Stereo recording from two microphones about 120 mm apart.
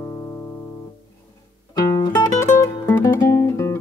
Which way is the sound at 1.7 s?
30° left (ahead or behind).